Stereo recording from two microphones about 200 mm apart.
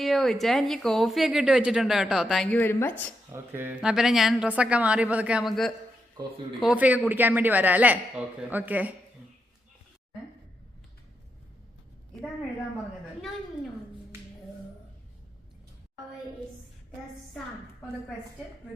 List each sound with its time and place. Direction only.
0.0 s speech: centre (ahead or behind)
3.3 s speech: 10° right (ahead or behind)
6.2 s speech: 20° right (ahead or behind)
6.6 s a man's voice: 5° right (ahead or behind)